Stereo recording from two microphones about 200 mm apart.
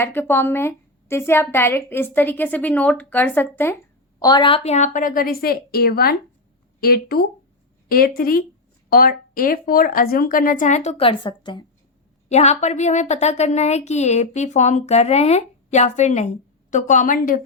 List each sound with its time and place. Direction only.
0.0 s a woman's voice: 10° left (ahead or behind)
4.2 s speech: 20° left (ahead or behind)
12.3 s a woman's voice: 35° left (ahead or behind)